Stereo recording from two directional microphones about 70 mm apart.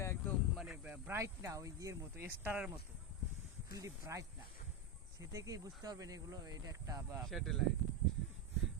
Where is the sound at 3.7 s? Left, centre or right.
Right.